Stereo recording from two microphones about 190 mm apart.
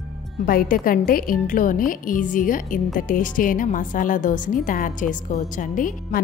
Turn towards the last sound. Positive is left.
turn(degrees=45)  # may be behind; listen again after turning